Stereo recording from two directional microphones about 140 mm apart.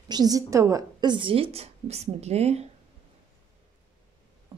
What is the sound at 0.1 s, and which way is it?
A woman's voice, 25° right (ahead or behind).